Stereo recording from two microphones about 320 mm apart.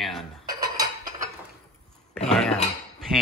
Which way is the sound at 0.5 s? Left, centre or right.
Centre.